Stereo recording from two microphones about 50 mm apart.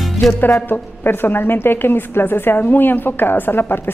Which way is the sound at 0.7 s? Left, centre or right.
Left.